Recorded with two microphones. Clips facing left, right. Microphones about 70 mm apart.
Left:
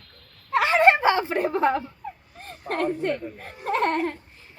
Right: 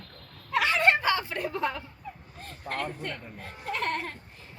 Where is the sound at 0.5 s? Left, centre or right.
Left.